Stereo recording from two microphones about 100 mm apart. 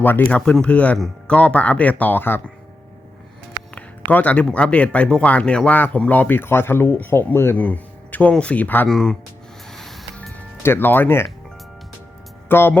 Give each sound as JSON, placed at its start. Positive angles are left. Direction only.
{"t": 0.0, "sound": "speech", "side_deg": 15}
{"t": 0.9, "sound": "speech", "side_deg": 0}
{"t": 1.4, "sound": "speech", "side_deg": 15}
{"t": 4.1, "sound": "speech", "side_deg": 15}
{"t": 8.9, "sound": "speech", "side_deg": 5}
{"t": 9.7, "sound": "music", "side_deg": 0}
{"t": 10.3, "sound": "speech", "side_deg": 20}
{"t": 12.5, "sound": "speech", "side_deg": 20}